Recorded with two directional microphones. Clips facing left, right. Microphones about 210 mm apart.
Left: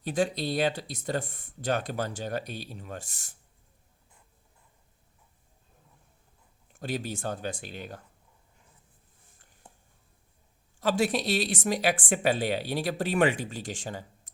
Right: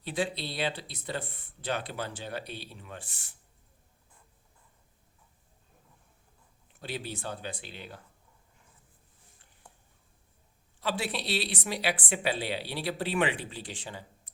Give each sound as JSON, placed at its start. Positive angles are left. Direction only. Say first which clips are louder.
{"t": 0.0, "sound": "speech", "louder": "left 5 dB", "side_deg": 45}
{"t": 6.7, "sound": "speech", "louder": "left 5 dB", "side_deg": 45}
{"t": 10.8, "sound": "speech", "louder": "left 7 dB", "side_deg": 45}